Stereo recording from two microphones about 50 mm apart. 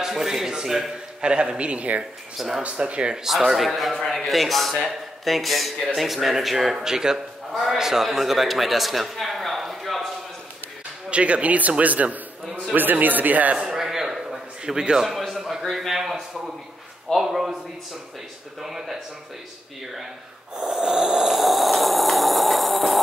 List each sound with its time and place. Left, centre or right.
0.0 s a man's voice: centre; by 2.0 s right
2.3 s a man's voice: centre
2.6 s speech: right
3.3 s a man's voice: centre
11.1 s a man's voice: right
13.6 s a sound: centre
17.1 s a man's voice: centre
18.6 s a man's voice: centre
20.5 s snoring: centre